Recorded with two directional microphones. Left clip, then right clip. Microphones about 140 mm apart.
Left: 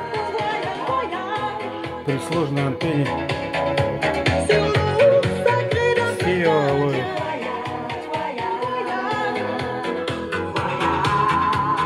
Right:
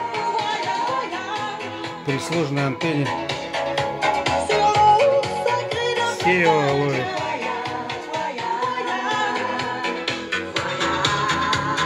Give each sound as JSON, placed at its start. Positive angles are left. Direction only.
{"t": 3.5, "sound": "music", "side_deg": 20}
{"t": 6.2, "sound": "music", "side_deg": -5}
{"t": 10.8, "sound": "music", "side_deg": 35}